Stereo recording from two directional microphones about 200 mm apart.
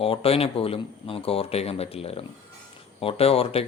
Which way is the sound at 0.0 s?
30° left (ahead or behind).